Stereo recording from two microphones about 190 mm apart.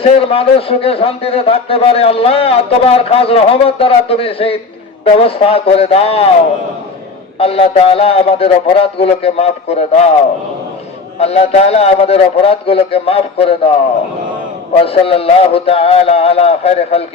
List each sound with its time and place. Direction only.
0.0 s a man's voice: 30° left (ahead or behind)
7.3 s a man's voice: 30° left (ahead or behind)
11.2 s a man's voice: 35° left (ahead or behind)
14.8 s a man's voice: 30° left (ahead or behind)